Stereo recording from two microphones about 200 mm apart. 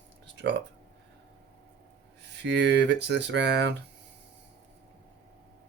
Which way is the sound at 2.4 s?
60° right (ahead or behind).